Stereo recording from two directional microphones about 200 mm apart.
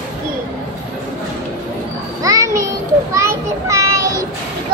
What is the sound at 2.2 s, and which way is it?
Music, 15° right (ahead or behind).